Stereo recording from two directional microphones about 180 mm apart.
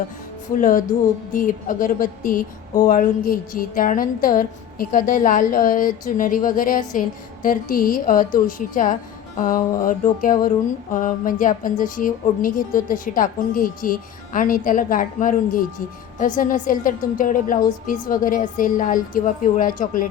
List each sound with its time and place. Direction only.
0.6 s a woman's voice: 50° left (ahead or behind)